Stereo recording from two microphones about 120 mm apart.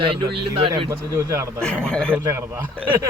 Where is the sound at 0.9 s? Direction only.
20° right (ahead or behind).